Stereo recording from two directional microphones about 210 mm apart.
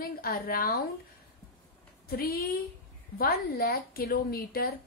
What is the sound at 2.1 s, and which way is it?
A woman's voice, 45° left (ahead or behind).